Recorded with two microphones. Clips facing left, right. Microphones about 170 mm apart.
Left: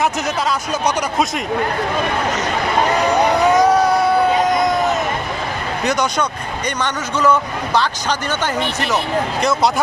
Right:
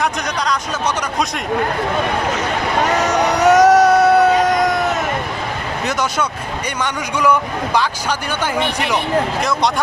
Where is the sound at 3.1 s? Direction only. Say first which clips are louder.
Right 2 dB; 75° right (ahead or behind).